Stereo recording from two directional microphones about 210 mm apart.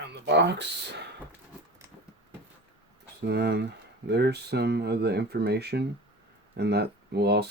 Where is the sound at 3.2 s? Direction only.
50° right (ahead or behind).